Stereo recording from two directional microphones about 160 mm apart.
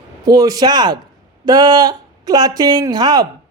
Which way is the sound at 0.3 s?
25° right (ahead or behind).